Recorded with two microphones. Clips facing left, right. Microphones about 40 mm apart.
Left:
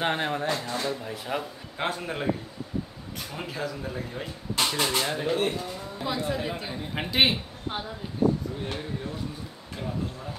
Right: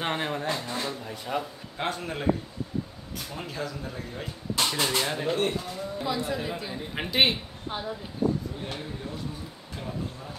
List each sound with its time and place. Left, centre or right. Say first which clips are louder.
0.0 s a man's voice: left 2 dB; centre
3.3 s speech: left 2 dB; centre
6.0 s speech: left 2 dB; centre
6.7 s a man's voice: even; centre